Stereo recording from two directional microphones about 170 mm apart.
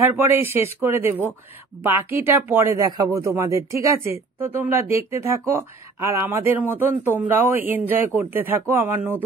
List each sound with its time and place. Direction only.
0.1 s speech: 15° right (ahead or behind)